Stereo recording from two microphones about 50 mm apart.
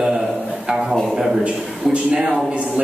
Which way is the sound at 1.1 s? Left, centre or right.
Centre.